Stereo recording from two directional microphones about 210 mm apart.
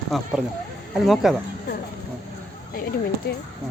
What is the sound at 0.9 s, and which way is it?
Speech, centre (ahead or behind).